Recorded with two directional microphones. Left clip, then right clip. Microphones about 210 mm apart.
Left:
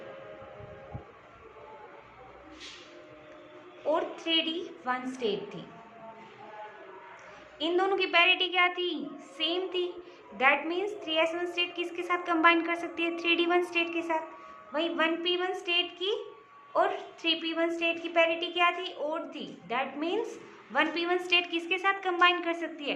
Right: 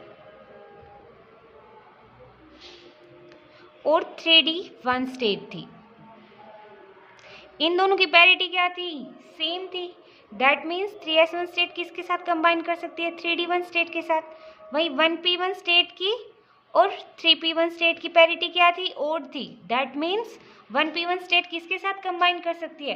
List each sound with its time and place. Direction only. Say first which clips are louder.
3.8 s a woman's voice: right 8 dB; 40° right (ahead or behind)
7.6 s a woman's voice: right 7 dB; 40° right (ahead or behind)